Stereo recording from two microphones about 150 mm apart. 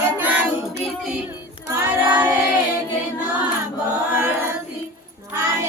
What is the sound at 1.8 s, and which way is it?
Music, 15° right (ahead or behind).